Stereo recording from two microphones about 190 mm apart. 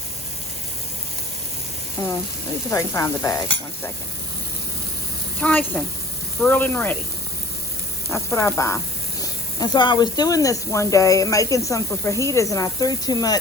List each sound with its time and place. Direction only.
2.0 s speech: 15° left (ahead or behind)
5.4 s speech: 10° left (ahead or behind)
8.1 s speech: 15° left (ahead or behind)